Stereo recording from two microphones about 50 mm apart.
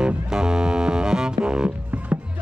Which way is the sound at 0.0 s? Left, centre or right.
Centre.